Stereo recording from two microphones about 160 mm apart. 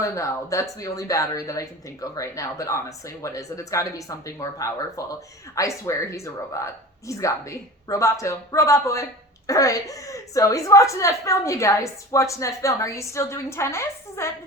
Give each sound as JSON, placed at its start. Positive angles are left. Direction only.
{"t": 0.0, "sound": "speech", "side_deg": 20}